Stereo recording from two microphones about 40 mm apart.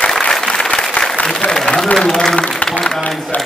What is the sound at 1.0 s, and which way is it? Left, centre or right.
Applause, left.